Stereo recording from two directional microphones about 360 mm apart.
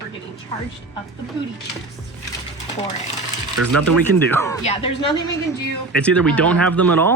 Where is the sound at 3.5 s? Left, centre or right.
Right.